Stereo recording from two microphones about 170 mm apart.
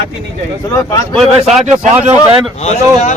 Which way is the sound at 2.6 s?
40° left (ahead or behind).